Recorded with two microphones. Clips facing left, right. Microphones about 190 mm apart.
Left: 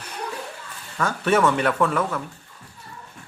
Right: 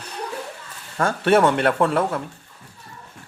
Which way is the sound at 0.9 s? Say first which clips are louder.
Right 3 dB; 30° right (ahead or behind).